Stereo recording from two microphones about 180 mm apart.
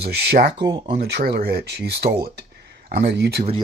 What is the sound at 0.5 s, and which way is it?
Speech, 25° right (ahead or behind).